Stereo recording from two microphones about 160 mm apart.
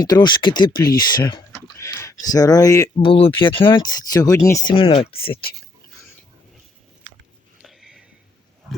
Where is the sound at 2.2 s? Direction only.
25° left (ahead or behind).